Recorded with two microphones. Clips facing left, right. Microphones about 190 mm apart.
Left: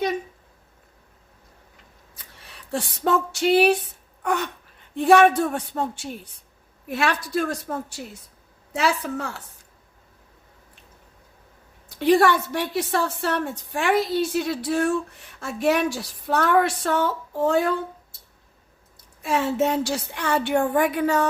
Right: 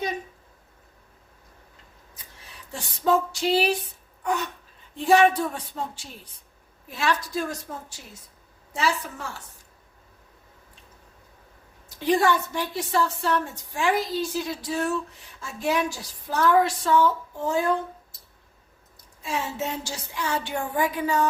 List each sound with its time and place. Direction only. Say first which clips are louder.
2.4 s a sound: left 10 dB; 65° left (ahead or behind)
4.2 s a woman's voice: left 2 dB; 65° left (ahead or behind)
11.9 s a woman's voice: left 4 dB; 65° left (ahead or behind)
19.2 s a woman's voice: left 8 dB; 60° left (ahead or behind)